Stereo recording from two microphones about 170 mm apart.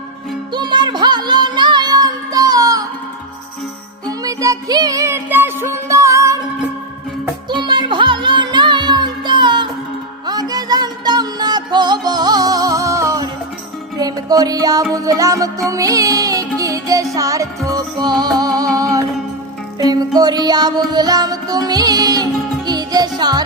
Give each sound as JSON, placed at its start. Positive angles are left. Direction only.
{"t": 0.5, "sound": "music", "side_deg": -25}
{"t": 4.2, "sound": "music", "side_deg": -20}
{"t": 7.6, "sound": "music", "side_deg": -30}